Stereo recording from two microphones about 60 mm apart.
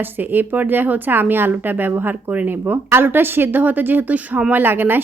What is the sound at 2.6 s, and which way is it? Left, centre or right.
A woman's voice, right.